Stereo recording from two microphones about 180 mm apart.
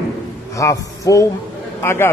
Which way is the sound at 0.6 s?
20° left (ahead or behind).